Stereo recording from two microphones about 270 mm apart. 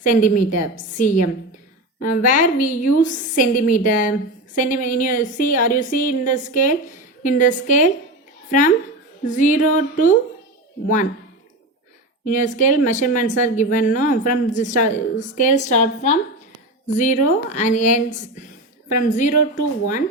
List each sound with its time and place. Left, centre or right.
0.0 s a woman's voice: left
12.2 s speech: left